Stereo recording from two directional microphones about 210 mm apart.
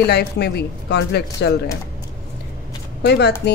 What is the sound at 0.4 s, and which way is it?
Speech, 50° left (ahead or behind).